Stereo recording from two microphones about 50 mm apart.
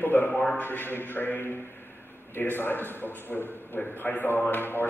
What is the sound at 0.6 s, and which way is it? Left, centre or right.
A man's voice, left.